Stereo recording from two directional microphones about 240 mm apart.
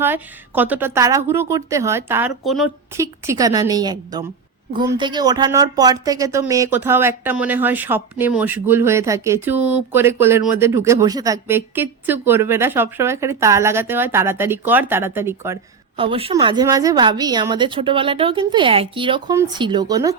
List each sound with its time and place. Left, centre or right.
0.0 s a woman's voice: centre
2.9 s speech: centre
16.0 s a woman's voice: right